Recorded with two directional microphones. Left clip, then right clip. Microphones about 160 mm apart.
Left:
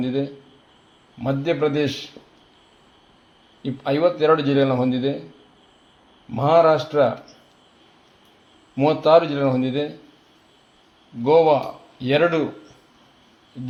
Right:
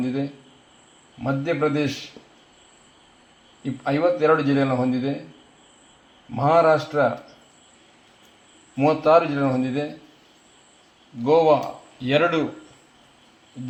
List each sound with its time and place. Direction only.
1.2 s speech: 80° left
3.8 s a man's voice: 80° left
6.3 s speech: 70° left (ahead or behind)
8.7 s speech: 85° left
11.2 s speech: 80° left